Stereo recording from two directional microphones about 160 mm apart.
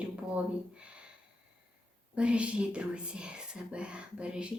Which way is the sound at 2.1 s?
5° right (ahead or behind).